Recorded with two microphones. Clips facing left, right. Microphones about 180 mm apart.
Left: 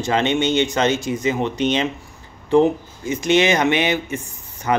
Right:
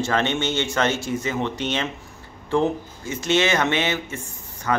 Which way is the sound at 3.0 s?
15° left (ahead or behind).